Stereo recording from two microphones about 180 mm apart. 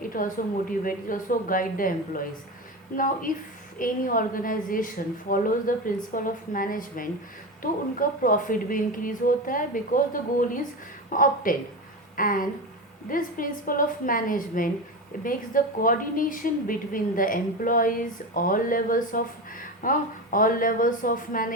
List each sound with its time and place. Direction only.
0.1 s a woman's voice: 50° left (ahead or behind)